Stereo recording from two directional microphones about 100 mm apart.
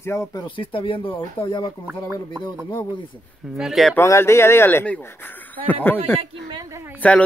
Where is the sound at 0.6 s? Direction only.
60° left (ahead or behind).